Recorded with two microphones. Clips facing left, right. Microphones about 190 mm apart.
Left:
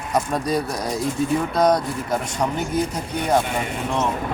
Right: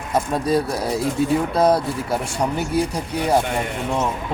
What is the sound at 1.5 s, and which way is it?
Speech, 30° right (ahead or behind).